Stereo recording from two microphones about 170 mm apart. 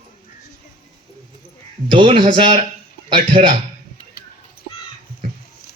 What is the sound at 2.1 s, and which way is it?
Speech, 25° right (ahead or behind).